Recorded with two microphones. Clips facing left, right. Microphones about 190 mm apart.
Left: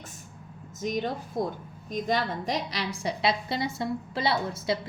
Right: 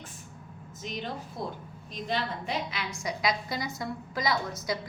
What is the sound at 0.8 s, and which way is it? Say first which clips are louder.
A woman's voice: left 7 dB; 45° left (ahead or behind).